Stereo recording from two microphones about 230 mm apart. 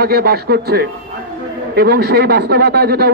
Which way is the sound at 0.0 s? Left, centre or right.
Right.